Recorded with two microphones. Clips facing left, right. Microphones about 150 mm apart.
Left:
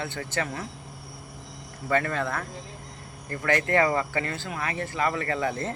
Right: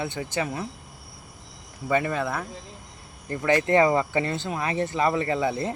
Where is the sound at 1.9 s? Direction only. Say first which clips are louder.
Right 1 dB; 15° right (ahead or behind).